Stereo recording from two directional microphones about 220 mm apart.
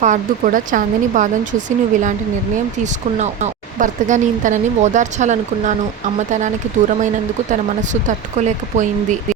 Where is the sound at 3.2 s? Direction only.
35° right (ahead or behind).